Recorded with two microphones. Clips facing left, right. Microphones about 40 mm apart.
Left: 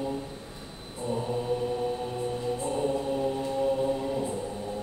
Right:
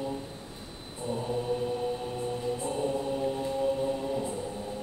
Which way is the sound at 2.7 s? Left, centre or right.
Centre.